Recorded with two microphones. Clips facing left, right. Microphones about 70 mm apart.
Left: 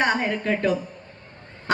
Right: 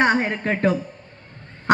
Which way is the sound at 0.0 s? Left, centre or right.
Right.